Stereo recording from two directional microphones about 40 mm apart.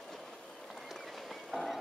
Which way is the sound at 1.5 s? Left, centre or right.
Centre.